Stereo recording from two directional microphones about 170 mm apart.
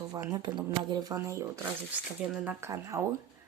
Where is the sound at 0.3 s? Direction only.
25° right (ahead or behind).